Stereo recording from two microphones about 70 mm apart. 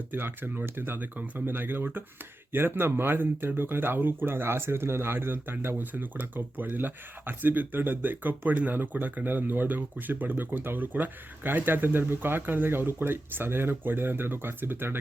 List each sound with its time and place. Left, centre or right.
0.1 s speech: right